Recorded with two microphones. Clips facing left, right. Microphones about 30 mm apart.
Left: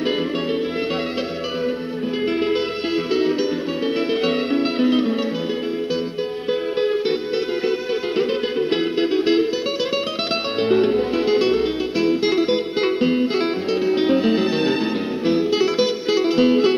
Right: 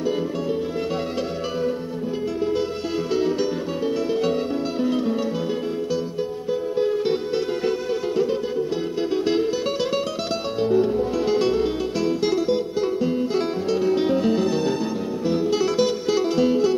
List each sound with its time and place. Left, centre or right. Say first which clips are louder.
4.2 s music: left 3 dB; left
9.1 s music: left 2 dB; left
10.6 s music: left 2 dB; left
11.2 s music: left 2 dB; left
13.8 s music: left 3 dB; left